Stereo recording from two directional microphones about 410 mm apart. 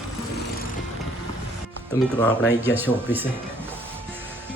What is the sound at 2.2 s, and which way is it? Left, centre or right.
Speech, centre.